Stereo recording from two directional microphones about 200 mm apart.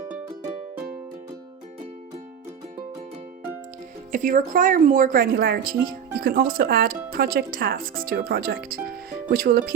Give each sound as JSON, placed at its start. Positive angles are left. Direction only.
{"t": 4.1, "sound": "speech", "side_deg": -40}